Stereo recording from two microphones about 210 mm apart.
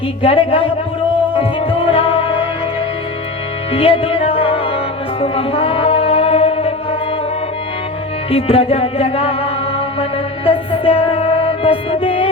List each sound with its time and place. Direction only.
0.2 s a woman's voice: 25° left (ahead or behind)
1.4 s music: 25° left (ahead or behind)
3.7 s music: 25° left (ahead or behind)
8.3 s music: 25° left (ahead or behind)